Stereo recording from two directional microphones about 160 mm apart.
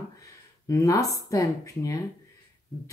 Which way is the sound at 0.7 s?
20° left (ahead or behind).